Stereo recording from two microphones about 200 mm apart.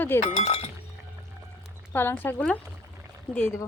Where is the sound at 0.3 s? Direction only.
35° left (ahead or behind).